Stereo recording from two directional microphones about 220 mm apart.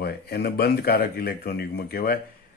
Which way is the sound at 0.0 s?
45° left (ahead or behind).